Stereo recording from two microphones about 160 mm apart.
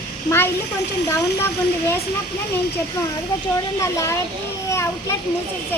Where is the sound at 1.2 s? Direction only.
15° left (ahead or behind).